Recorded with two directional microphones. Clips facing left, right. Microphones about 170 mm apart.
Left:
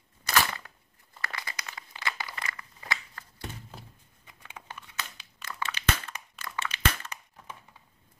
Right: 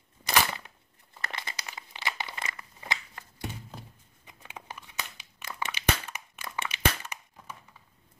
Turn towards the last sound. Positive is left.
turn(degrees=-15)  # may be behind; listen again after turning